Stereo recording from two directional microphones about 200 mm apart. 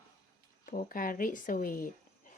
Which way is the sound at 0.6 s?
40° left (ahead or behind).